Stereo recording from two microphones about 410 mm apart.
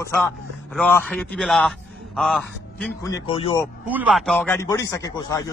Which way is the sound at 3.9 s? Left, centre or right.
Centre.